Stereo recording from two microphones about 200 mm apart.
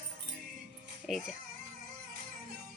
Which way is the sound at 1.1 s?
Centre (ahead or behind).